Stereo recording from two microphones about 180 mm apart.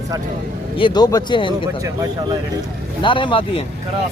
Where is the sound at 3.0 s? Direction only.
25° left (ahead or behind).